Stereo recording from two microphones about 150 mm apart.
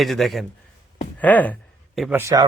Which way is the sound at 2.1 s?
15° right (ahead or behind).